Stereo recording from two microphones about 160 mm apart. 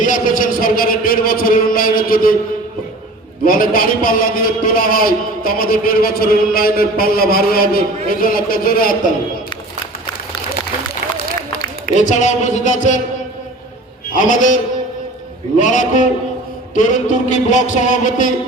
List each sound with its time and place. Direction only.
0.0 s a sound: 55° left (ahead or behind)
3.4 s a man's voice: 65° left (ahead or behind)
11.9 s music: 50° left (ahead or behind)
14.1 s music: 55° left (ahead or behind)